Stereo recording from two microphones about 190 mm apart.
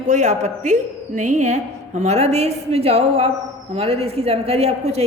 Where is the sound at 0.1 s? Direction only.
40° right (ahead or behind).